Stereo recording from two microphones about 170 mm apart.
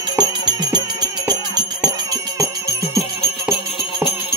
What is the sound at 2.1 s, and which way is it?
Music, 20° right (ahead or behind).